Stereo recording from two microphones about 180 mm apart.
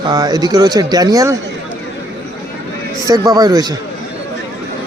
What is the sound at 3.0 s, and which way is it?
Speech, 20° right (ahead or behind).